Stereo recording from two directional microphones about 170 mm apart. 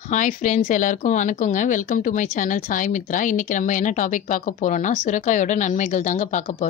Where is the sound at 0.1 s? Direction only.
50° left (ahead or behind).